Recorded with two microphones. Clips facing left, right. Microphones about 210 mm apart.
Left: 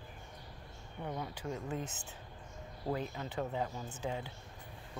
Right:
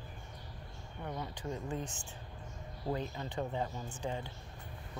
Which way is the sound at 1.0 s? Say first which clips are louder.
Even; 10° left (ahead or behind).